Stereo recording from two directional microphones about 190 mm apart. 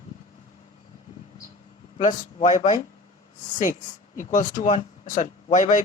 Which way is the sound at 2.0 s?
40° left (ahead or behind).